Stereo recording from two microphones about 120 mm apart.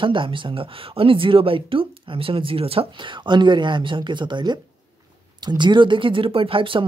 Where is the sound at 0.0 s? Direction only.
45° right (ahead or behind).